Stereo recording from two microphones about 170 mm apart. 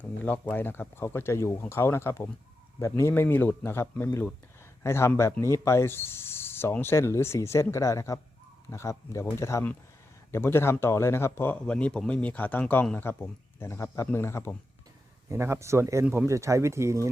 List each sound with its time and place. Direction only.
0.0 s speech: 10° left (ahead or behind)
15.3 s speech: 15° right (ahead or behind)